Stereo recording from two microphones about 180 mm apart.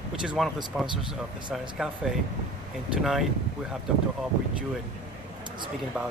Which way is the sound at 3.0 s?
Centre (ahead or behind).